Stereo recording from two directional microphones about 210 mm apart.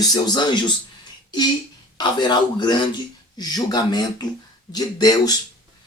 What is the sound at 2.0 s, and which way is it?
A man's voice, 20° left (ahead or behind).